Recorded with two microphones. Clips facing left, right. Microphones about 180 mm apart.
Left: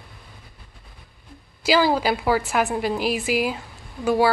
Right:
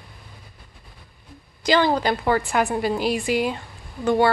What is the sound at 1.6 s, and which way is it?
A woman's voice, 5° left (ahead or behind).